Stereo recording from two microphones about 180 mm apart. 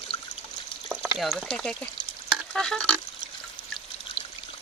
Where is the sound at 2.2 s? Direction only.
5° left (ahead or behind).